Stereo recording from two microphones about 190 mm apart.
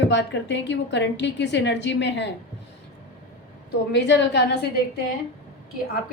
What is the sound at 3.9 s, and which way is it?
Speech, 65° left (ahead or behind).